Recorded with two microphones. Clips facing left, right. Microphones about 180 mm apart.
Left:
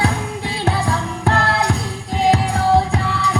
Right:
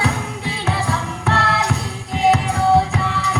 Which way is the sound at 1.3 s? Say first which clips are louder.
Left 2 dB; 35° left (ahead or behind).